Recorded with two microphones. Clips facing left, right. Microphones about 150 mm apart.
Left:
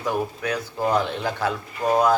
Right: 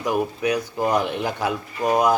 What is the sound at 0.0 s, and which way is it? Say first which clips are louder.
Speech: right 3 dB; 15° right (ahead or behind).